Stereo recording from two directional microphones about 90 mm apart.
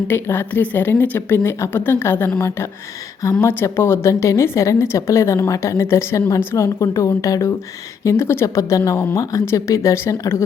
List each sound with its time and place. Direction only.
0.1 s speech: 25° left (ahead or behind)
3.4 s a woman's voice: 25° left (ahead or behind)